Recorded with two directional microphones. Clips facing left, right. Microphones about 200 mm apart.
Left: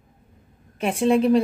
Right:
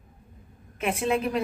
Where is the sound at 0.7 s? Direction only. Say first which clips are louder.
Left 6 dB; 30° left (ahead or behind).